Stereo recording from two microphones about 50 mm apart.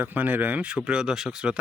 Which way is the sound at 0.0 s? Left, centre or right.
Right.